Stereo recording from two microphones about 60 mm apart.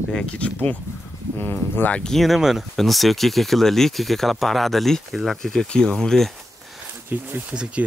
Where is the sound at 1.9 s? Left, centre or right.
Centre.